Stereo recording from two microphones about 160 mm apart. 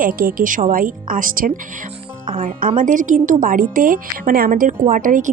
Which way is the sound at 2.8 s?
55° right (ahead or behind).